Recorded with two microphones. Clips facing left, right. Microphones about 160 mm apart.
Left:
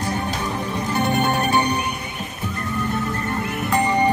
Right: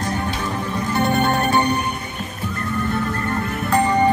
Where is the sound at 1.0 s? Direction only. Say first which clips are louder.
Right 2 dB; 15° left (ahead or behind).